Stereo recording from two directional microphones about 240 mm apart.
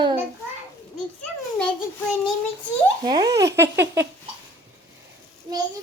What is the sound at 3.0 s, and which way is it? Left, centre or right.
Baby laughter, centre.